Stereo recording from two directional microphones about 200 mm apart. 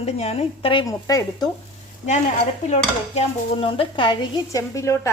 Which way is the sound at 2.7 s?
30° left (ahead or behind).